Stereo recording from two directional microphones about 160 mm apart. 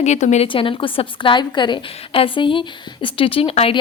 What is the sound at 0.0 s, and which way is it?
Speech, 45° left (ahead or behind).